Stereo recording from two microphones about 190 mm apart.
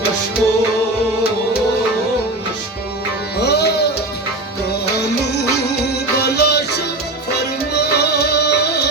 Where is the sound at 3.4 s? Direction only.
60° left (ahead or behind).